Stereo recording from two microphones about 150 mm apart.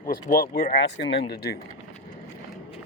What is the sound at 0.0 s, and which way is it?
Speech, 70° left (ahead or behind).